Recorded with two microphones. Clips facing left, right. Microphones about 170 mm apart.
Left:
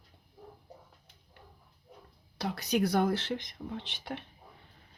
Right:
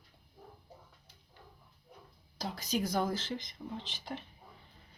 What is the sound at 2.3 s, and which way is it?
Speech, 65° left (ahead or behind).